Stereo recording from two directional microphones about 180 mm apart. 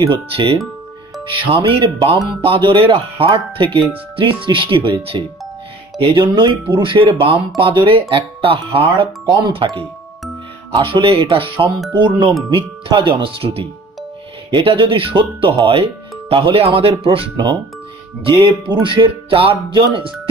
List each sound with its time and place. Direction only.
0.1 s speech: 30° right (ahead or behind)